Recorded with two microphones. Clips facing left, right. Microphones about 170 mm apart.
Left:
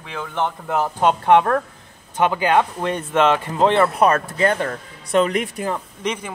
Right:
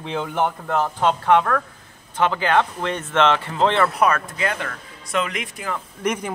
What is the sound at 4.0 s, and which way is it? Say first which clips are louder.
Speech: left 3 dB; 35° left (ahead or behind).